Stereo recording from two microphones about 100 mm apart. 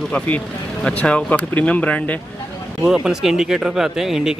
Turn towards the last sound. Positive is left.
turn(degrees=-5)  # may be behind; listen again after turning